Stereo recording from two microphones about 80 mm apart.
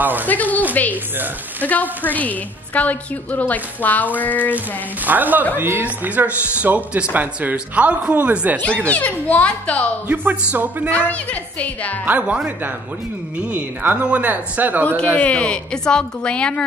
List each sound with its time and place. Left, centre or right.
0.0 s speech: right
0.3 s a woman's voice: left
5.0 s speech: right
8.8 s a woman's voice: centre
10.0 s speech: right
10.9 s a woman's voice: centre
12.1 s speech: centre
15.1 s a woman's voice: centre